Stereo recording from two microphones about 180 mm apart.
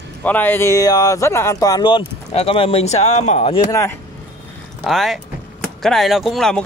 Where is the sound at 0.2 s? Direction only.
10° left (ahead or behind); by 3.6 s 35° left (ahead or behind).